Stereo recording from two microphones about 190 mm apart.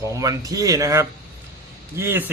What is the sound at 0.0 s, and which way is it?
A man's voice, 15° right (ahead or behind).